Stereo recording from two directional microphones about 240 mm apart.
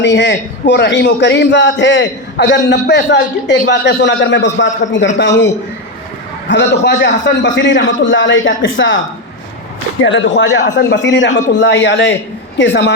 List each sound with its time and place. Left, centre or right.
0.0 s a man's voice: left
6.5 s a man's voice: left
10.0 s a man's voice: left